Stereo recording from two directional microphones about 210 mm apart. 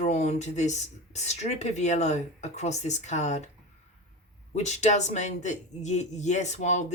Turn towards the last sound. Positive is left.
turn(degrees=35)  # may be behind; listen again after turning